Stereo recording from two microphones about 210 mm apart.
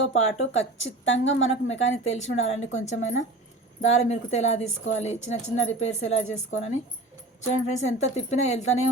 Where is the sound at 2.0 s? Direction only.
30° left (ahead or behind).